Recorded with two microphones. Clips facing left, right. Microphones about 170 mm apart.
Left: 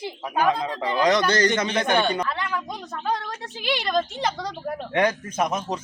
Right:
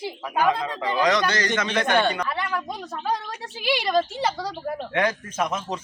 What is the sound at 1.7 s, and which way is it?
Speech, 15° left (ahead or behind).